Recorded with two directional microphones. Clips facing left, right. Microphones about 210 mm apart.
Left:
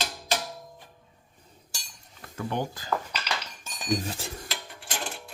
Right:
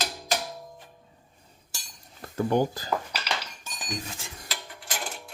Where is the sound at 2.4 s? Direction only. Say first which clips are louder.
Right 7 dB; 40° right (ahead or behind).